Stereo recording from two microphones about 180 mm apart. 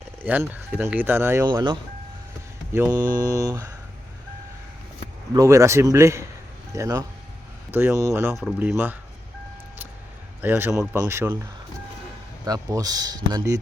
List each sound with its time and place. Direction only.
0.2 s speech: 10° right (ahead or behind)
1.5 s speech: 25° right (ahead or behind)
2.7 s speech: 10° right (ahead or behind)
5.3 s speech: 15° right (ahead or behind)
10.4 s speech: 10° right (ahead or behind)
12.5 s speech: 20° right (ahead or behind)